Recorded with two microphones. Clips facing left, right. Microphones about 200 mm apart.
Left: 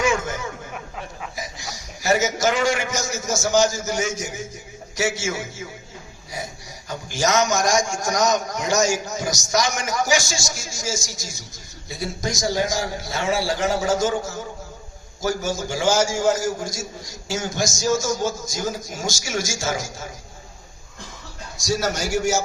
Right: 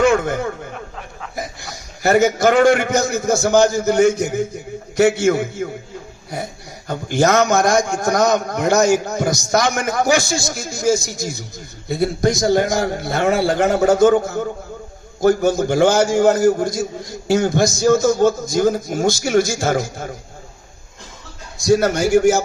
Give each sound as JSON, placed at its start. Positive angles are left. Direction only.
{"t": 0.0, "sound": "a sound", "side_deg": -60}
{"t": 1.4, "sound": "a man's voice", "side_deg": -55}
{"t": 21.6, "sound": "a man's voice", "side_deg": -55}